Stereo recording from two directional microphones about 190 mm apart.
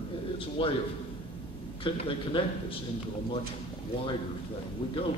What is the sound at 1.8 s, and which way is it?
Speech, 30° left (ahead or behind).